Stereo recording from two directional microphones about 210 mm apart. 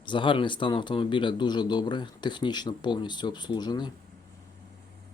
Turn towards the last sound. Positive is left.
turn(degrees=20)  # may be behind; listen again after turning